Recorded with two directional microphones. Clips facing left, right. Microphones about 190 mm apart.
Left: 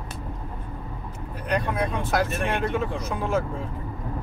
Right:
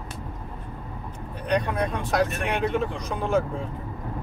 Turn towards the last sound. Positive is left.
turn(degrees=0)  # may be behind; listen again after turning